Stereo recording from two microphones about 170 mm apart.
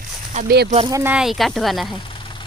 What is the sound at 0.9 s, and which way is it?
Speech, 20° right (ahead or behind).